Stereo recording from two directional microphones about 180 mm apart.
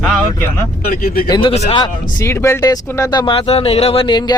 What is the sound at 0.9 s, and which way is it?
Speech, 50° left (ahead or behind).